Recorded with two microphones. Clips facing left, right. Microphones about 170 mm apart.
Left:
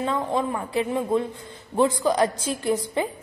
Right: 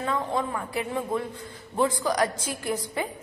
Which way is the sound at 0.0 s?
25° left (ahead or behind).